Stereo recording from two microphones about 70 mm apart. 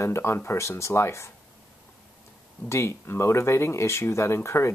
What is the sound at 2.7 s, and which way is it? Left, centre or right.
Speech, left.